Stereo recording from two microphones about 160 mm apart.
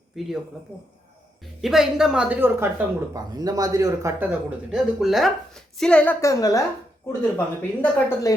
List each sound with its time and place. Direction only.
0.1 s speech: centre (ahead or behind)
1.6 s speech: centre (ahead or behind)
3.1 s speech: 25° right (ahead or behind)
4.2 s speech: 5° right (ahead or behind)
6.2 s a woman's voice: 20° left (ahead or behind)